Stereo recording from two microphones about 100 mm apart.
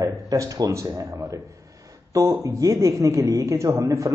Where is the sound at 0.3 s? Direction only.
35° right (ahead or behind).